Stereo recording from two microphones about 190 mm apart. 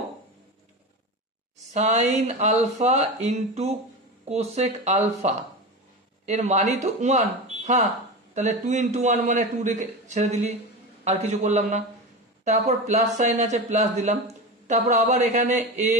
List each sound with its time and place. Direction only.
1.7 s speech: 35° right (ahead or behind)